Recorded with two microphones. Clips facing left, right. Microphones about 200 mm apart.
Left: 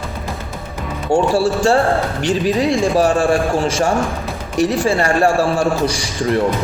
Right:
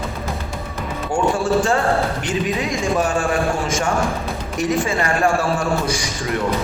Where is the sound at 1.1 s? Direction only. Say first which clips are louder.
Left 3 dB; 35° left (ahead or behind).